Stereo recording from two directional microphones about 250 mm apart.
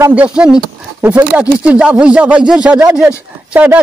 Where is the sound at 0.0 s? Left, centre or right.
Centre.